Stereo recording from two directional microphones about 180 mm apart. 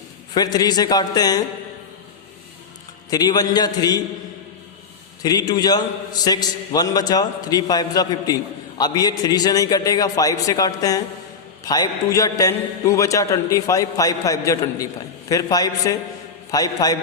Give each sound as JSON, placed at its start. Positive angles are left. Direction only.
{"t": 0.3, "sound": "a man's voice", "side_deg": 20}
{"t": 3.1, "sound": "a man's voice", "side_deg": 20}
{"t": 5.2, "sound": "a man's voice", "side_deg": 20}